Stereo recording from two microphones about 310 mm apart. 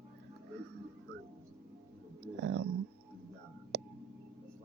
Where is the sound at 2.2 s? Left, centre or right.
Right.